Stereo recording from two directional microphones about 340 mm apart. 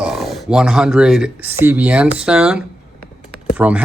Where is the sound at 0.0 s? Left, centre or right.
Centre.